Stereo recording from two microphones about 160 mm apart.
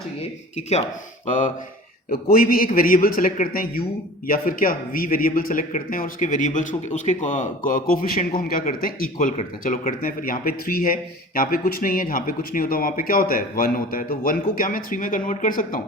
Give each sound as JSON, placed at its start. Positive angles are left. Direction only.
{"t": 0.5, "sound": "speech", "side_deg": 45}
{"t": 2.3, "sound": "speech", "side_deg": 65}
{"t": 9.3, "sound": "speech", "side_deg": 45}
{"t": 10.0, "sound": "speech", "side_deg": 60}